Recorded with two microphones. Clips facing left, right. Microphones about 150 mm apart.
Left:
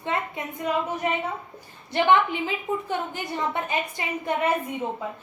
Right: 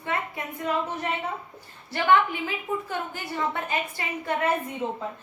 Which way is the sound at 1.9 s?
20° left (ahead or behind).